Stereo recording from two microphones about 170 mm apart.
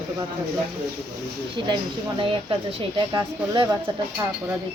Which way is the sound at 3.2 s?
25° right (ahead or behind).